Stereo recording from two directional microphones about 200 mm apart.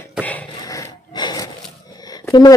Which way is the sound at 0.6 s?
20° left (ahead or behind).